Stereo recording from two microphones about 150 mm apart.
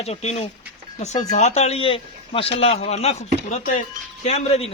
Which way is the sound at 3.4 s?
55° left (ahead or behind).